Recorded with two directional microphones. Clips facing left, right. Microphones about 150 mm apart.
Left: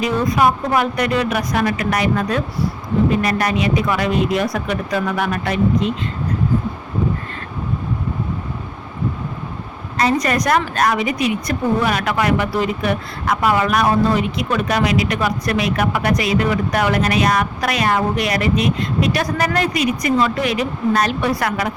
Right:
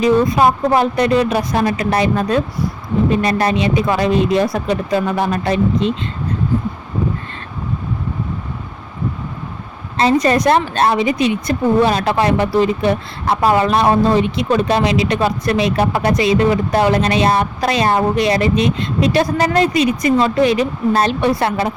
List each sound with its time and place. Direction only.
0.0 s speech: 25° right (ahead or behind)
10.0 s speech: 25° right (ahead or behind)